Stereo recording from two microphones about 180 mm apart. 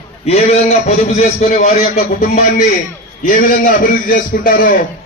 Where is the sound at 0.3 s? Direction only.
35° left (ahead or behind).